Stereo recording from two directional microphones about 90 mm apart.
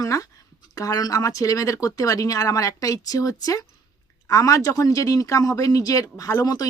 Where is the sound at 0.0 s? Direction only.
40° left (ahead or behind).